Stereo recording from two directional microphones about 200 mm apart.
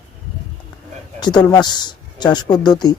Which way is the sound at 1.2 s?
20° left (ahead or behind).